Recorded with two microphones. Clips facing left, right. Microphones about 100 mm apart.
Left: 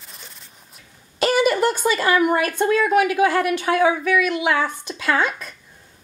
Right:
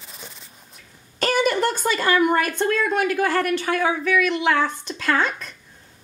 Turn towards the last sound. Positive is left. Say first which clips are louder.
# left 1 dB
turn(degrees=5)  # may be behind; listen again after turning